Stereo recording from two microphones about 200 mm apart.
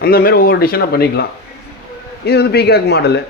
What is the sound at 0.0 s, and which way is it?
Speech, 50° left (ahead or behind).